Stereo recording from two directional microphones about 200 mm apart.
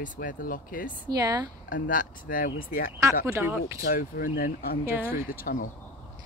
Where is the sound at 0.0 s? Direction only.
40° left (ahead or behind).